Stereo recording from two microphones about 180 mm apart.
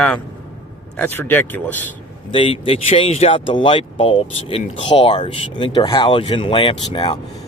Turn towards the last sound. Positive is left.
turn(degrees=30)  # may be behind; listen again after turning